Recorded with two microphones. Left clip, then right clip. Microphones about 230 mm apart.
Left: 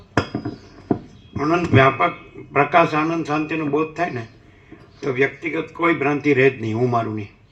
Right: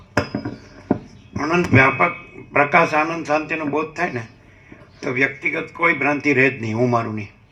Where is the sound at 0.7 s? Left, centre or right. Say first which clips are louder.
Right 1 dB; right.